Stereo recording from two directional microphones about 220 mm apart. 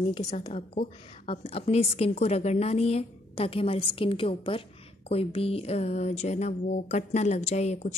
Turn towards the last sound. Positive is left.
turn(degrees=30)  # may be behind; listen again after turning